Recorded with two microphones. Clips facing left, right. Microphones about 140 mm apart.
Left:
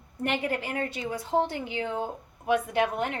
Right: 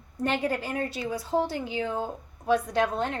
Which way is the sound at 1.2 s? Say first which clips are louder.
Left 1 dB; 20° left (ahead or behind).